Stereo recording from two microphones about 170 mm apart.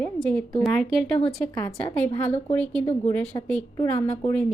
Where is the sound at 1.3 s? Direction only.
10° left (ahead or behind).